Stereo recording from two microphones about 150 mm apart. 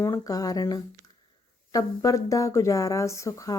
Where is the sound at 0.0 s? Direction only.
20° left (ahead or behind).